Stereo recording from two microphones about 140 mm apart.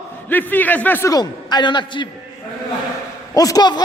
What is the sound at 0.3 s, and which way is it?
Speech, 15° left (ahead or behind).